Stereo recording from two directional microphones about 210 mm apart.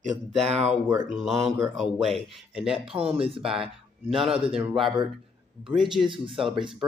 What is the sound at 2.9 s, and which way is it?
Speech, 25° right (ahead or behind).